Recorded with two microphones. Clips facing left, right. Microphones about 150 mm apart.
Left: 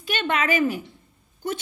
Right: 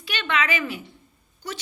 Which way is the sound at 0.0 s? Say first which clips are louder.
Left 2 dB; 45° left (ahead or behind).